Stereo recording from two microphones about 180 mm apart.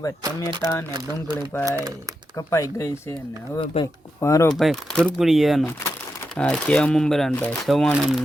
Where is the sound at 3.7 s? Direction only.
35° left (ahead or behind).